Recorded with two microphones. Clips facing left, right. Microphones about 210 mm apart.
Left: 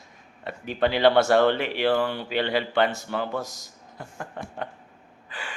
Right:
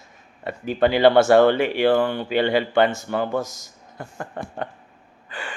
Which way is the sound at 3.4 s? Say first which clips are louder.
Right 6 dB; 20° right (ahead or behind).